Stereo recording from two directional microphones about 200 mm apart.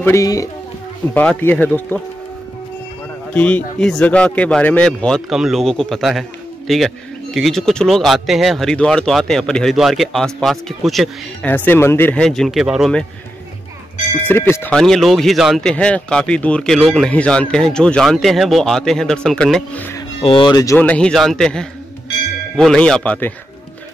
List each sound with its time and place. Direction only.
0.0 s speech: 15° left (ahead or behind)
3.3 s speech: 5° left (ahead or behind)
14.2 s speech: 10° left (ahead or behind)
20.2 s speech: 25° left (ahead or behind); by 23.3 s 5° left (ahead or behind)